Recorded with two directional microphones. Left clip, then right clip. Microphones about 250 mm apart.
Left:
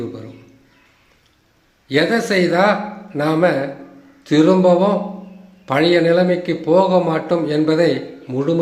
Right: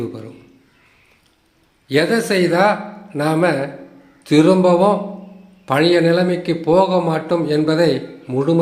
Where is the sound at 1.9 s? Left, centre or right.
Centre.